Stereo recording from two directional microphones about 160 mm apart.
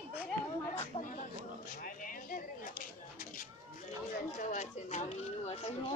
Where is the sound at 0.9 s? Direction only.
35° left (ahead or behind).